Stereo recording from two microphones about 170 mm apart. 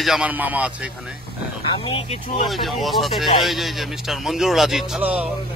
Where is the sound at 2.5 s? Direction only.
Centre (ahead or behind).